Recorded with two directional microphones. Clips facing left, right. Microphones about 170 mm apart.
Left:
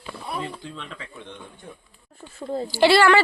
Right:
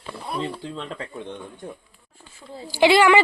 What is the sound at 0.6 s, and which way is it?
Speech, 35° right (ahead or behind).